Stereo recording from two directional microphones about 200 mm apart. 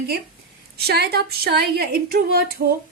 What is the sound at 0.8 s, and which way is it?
A woman's voice, 55° right (ahead or behind).